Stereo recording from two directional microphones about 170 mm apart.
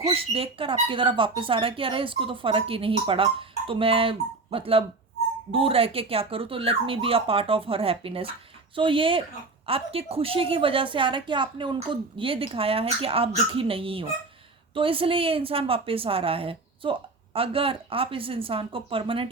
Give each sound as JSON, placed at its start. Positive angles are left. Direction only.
{"t": 0.0, "sound": "a woman's voice", "side_deg": -35}